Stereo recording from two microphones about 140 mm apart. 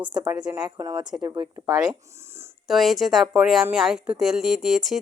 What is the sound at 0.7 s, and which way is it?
Speech, 30° right (ahead or behind).